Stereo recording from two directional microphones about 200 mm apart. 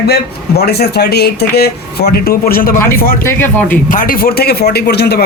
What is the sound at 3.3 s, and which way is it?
Speech, 10° left (ahead or behind).